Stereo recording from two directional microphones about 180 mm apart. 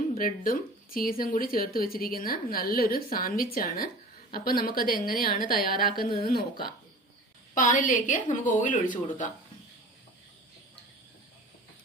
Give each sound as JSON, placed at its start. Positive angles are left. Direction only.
{"t": 0.2, "sound": "a woman's voice", "side_deg": 50}